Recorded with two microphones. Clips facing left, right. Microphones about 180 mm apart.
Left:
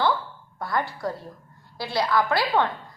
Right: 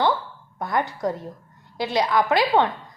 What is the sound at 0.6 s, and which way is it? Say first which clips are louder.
A woman's voice: right 3 dB; 20° right (ahead or behind).